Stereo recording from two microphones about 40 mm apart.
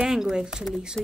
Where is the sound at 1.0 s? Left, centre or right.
Centre.